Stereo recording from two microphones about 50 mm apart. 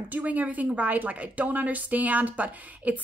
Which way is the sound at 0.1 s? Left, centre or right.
Right.